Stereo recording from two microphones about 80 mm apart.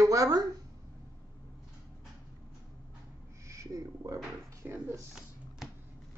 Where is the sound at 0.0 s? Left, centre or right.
Right.